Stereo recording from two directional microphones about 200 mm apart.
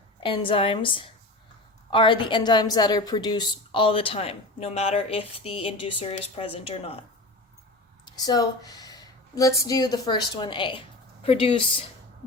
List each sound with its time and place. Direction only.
0.2 s a woman's voice: 25° left (ahead or behind)
8.0 s speech: 20° left (ahead or behind)